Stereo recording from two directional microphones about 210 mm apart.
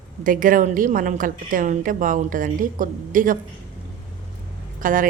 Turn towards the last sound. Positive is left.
turn(degrees=-40)  # may be behind; listen again after turning